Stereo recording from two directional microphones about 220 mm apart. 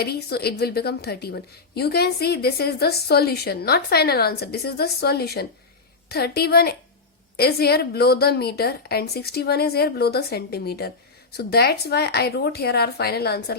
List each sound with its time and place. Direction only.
0.0 s a woman's voice: 45° left (ahead or behind)